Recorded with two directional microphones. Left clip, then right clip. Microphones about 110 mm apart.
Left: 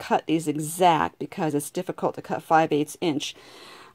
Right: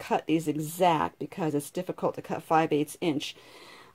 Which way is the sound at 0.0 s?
45° left (ahead or behind).